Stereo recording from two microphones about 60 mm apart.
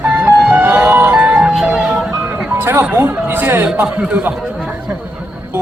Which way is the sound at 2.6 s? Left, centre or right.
Right.